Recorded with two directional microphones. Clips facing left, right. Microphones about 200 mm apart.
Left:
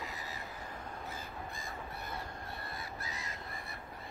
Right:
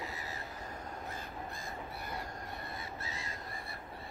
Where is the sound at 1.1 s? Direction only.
5° left (ahead or behind).